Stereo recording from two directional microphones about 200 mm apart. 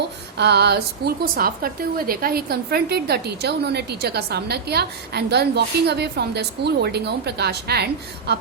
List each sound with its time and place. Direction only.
0.3 s a woman's voice: 55° right (ahead or behind)